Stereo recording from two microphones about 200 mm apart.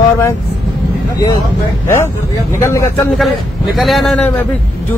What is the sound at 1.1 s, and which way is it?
Speech, 15° left (ahead or behind).